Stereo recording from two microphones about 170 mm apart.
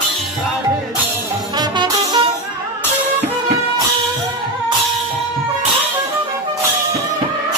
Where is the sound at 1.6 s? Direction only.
25° right (ahead or behind).